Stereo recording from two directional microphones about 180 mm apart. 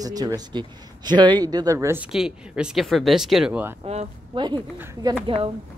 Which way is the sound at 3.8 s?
30° right (ahead or behind).